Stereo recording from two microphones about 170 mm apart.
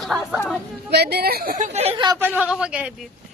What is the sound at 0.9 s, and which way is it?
A woman's voice, 70° right (ahead or behind).